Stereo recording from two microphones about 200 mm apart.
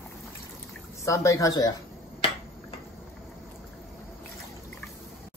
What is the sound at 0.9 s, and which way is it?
Speech, 15° left (ahead or behind).